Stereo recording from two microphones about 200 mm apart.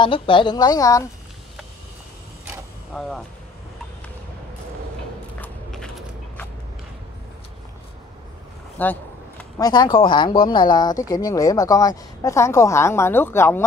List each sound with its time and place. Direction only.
0.0 s a woman's voice: 25° left (ahead or behind)
2.9 s speech: centre (ahead or behind)
5.4 s a sound: 5° left (ahead or behind)
8.8 s speech: 10° left (ahead or behind)
9.6 s a woman's voice: 20° left (ahead or behind)